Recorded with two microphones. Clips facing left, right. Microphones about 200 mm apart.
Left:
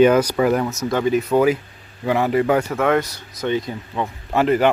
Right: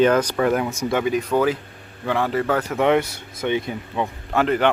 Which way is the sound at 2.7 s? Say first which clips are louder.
Even; 20° right (ahead or behind).